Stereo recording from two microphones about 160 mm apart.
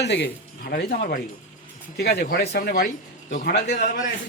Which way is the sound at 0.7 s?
65° left (ahead or behind).